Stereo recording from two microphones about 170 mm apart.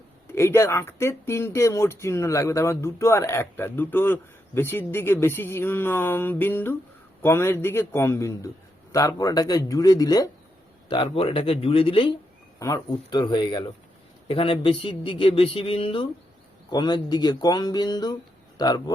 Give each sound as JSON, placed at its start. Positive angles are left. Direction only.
{"t": 0.3, "sound": "speech", "side_deg": 15}
{"t": 12.5, "sound": "speech", "side_deg": 20}